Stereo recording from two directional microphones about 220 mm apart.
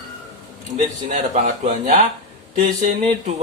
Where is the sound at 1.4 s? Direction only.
30° right (ahead or behind).